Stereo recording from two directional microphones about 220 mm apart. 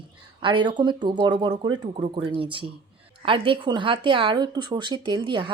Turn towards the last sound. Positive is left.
turn(degrees=-20)  # may be behind; listen again after turning